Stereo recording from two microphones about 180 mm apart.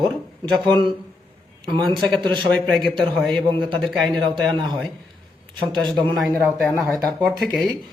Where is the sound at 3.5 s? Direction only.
25° right (ahead or behind).